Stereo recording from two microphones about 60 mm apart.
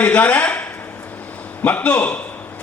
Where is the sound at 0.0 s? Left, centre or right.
Left.